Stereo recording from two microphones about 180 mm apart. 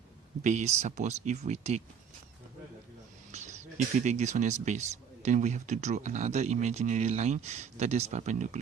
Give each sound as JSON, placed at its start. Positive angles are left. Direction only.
{"t": 0.4, "sound": "speech", "side_deg": -40}
{"t": 3.3, "sound": "speech", "side_deg": -40}